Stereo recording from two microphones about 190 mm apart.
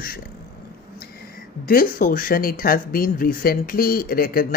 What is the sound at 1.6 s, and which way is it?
Speech, 50° left (ahead or behind).